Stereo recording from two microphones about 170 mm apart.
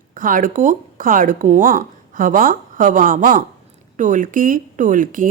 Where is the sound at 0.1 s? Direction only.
55° right (ahead or behind).